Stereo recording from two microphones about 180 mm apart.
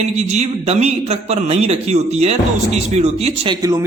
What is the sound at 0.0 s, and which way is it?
Speech, 35° right (ahead or behind).